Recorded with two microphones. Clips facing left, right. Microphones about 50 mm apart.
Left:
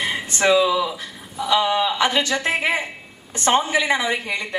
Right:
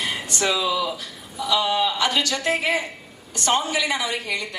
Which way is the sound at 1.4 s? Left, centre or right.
Left.